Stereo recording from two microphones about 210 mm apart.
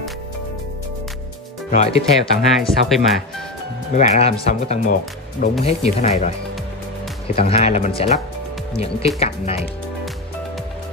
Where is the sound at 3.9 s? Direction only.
30° left (ahead or behind).